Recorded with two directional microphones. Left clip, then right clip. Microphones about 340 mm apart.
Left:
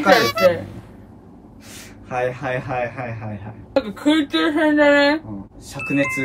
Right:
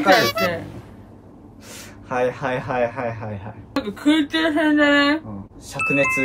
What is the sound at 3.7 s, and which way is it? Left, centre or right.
Speech, centre.